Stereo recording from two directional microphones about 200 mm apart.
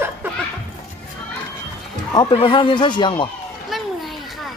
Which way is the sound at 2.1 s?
25° left (ahead or behind).